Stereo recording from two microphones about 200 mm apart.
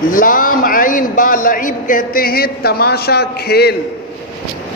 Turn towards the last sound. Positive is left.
turn(degrees=55)  # may be behind; listen again after turning